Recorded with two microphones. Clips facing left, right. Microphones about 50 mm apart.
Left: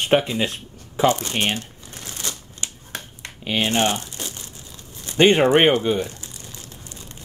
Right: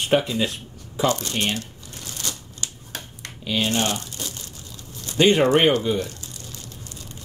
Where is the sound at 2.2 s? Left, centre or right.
Left.